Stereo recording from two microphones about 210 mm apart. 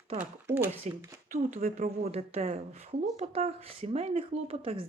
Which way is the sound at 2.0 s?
30° right (ahead or behind).